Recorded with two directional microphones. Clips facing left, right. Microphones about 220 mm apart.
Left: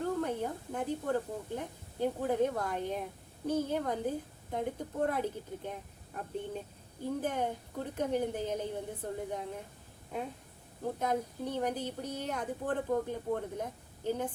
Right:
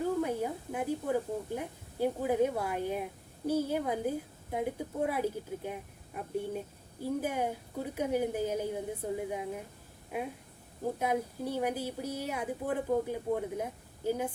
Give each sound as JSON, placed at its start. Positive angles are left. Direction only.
{"t": 0.0, "sound": "a woman's voice", "side_deg": -10}